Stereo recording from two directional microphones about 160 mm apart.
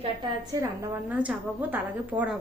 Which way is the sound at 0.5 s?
20° right (ahead or behind).